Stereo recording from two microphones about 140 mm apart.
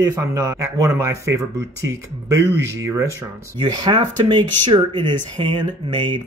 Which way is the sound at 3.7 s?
35° right (ahead or behind).